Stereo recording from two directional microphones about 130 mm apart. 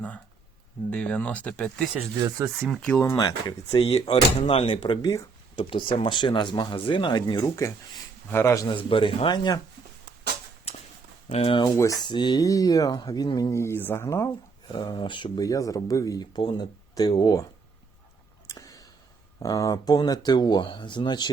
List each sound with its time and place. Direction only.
0.9 s speech: 10° left (ahead or behind)
2.1 s speech: 30° right (ahead or behind)
3.0 s speech: 25° left (ahead or behind)
3.7 s speech: 50° left (ahead or behind); by 8.6 s 20° left (ahead or behind)
8.6 s speech: 40° left (ahead or behind)
11.3 s speech: 45° left (ahead or behind)
11.6 s speech: 30° left (ahead or behind)
14.7 s speech: 35° left (ahead or behind)
18.4 s clicking: 25° left (ahead or behind)
19.4 s speech: 25° left (ahead or behind)